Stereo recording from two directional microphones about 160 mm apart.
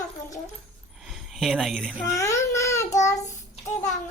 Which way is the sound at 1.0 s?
Centre (ahead or behind).